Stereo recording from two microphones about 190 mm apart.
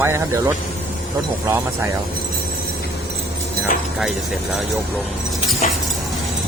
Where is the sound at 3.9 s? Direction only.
Centre (ahead or behind).